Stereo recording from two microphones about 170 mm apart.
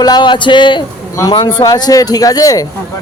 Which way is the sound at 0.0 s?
25° left (ahead or behind).